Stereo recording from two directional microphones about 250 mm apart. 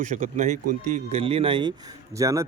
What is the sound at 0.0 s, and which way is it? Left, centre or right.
Speech, right.